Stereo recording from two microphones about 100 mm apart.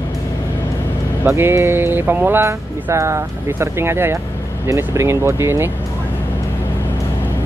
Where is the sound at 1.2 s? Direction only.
25° right (ahead or behind).